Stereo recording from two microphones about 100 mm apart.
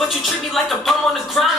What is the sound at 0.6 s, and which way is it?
Speech, centre (ahead or behind).